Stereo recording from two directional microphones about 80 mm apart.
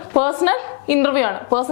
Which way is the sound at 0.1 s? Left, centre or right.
Left.